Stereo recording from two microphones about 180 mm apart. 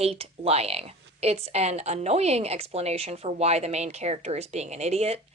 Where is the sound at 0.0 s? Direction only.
35° right (ahead or behind).